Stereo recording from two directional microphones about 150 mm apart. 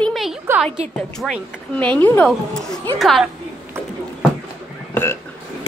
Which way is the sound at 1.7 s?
10° left (ahead or behind).